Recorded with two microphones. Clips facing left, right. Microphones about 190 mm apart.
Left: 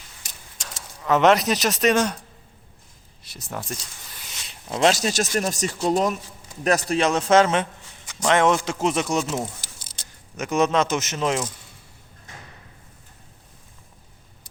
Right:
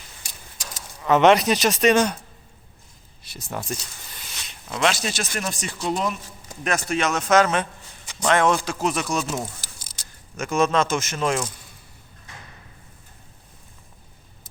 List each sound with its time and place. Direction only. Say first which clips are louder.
1.0 s speech: right 2 dB; centre (ahead or behind)
3.2 s speech: right 2 dB; centre (ahead or behind)
4.3 s a man's voice: left 3 dB; 30° left (ahead or behind)
9.3 s a sound: left 2 dB; 25° left (ahead or behind)
10.0 s speech: even; 20° left (ahead or behind)